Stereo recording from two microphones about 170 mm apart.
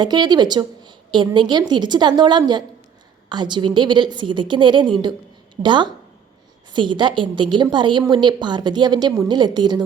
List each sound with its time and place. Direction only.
0.0 s a woman's voice: 25° right (ahead or behind)